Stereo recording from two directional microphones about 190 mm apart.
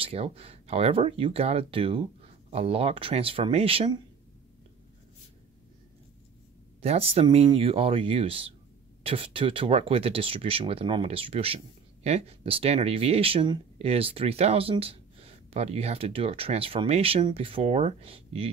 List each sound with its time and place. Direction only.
0.0 s speech: 30° right (ahead or behind)
6.8 s speech: 30° right (ahead or behind)